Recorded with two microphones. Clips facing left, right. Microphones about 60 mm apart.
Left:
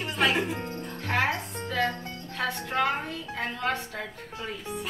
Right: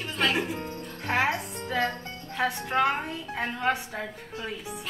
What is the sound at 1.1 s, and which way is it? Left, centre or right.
A woman's voice, centre.